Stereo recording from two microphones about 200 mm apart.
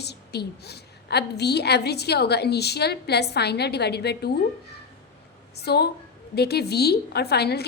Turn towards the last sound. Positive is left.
turn(degrees=55)  # may be behind; listen again after turning